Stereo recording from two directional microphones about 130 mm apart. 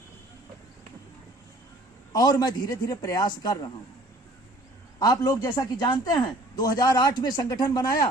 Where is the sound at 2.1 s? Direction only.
30° left (ahead or behind).